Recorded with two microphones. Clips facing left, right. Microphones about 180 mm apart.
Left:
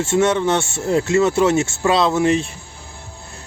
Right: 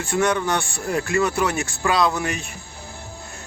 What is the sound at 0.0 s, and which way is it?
Speech, 25° left (ahead or behind).